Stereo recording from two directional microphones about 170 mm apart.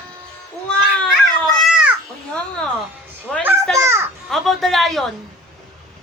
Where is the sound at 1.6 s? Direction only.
5° right (ahead or behind).